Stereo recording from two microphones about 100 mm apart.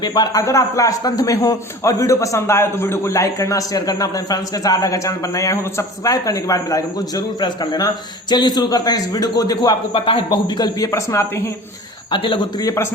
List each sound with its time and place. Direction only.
0.0 s a man's voice: 40° left (ahead or behind)
10.9 s a man's voice: 30° left (ahead or behind)
12.1 s a man's voice: 60° left (ahead or behind)
12.5 s a man's voice: 35° left (ahead or behind)